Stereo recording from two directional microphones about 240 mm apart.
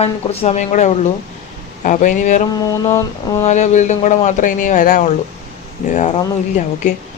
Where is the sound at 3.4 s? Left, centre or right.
Left.